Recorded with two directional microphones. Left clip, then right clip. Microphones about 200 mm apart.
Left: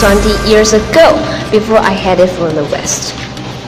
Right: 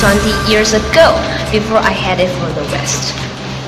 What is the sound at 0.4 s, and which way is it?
Speech, 55° left (ahead or behind).